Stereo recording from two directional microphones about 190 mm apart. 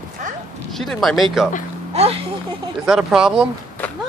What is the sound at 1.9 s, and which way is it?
Speech, 35° right (ahead or behind).